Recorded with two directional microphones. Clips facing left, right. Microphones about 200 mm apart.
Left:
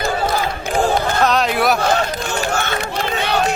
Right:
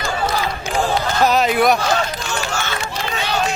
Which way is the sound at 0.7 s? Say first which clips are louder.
Left 3 dB; 50° left (ahead or behind).